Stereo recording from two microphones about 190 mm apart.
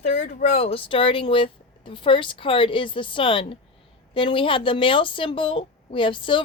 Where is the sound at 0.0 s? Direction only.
35° left (ahead or behind).